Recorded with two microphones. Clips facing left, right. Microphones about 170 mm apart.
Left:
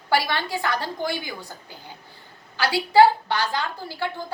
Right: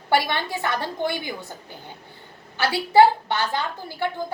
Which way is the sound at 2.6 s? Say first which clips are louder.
Even; 25° right (ahead or behind).